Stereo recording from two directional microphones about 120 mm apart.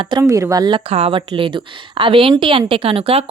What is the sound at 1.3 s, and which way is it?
A woman's voice, 45° right (ahead or behind).